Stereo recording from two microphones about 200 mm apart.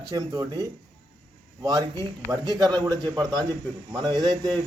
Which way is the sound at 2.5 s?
20° right (ahead or behind).